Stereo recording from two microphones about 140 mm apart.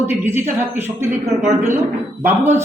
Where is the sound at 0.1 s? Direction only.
15° right (ahead or behind).